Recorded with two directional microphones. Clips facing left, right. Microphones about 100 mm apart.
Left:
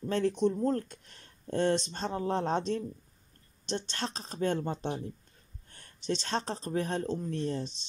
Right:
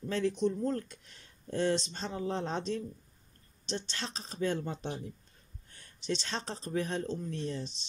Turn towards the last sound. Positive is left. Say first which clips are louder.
# left 4 dB
turn(degrees=45)  # may be behind; listen again after turning